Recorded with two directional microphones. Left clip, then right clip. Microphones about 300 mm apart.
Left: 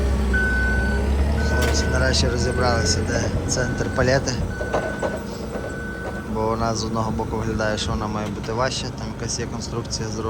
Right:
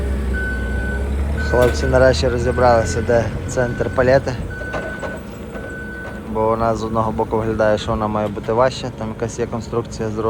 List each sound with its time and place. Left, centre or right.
1.4 s speech: centre
6.4 s speech: centre